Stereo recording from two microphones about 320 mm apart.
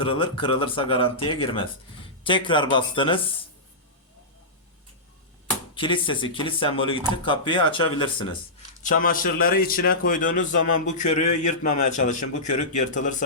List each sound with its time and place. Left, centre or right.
0.0 s speech: centre
5.7 s speech: centre
8.8 s a man's voice: left